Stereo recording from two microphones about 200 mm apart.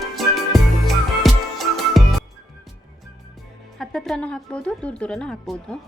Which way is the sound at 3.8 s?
Centre (ahead or behind).